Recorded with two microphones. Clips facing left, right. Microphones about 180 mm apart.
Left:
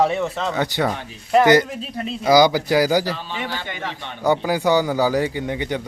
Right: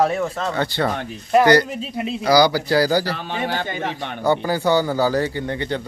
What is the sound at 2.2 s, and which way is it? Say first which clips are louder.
Speech: left 1 dB; 20° left (ahead or behind).